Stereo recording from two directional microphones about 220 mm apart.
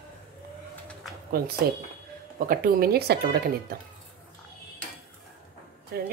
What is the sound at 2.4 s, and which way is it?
A woman's voice, 40° right (ahead or behind).